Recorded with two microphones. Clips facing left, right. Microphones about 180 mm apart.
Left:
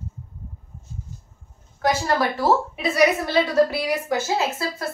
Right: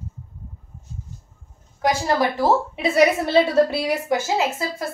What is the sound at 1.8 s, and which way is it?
A woman's voice, 20° right (ahead or behind).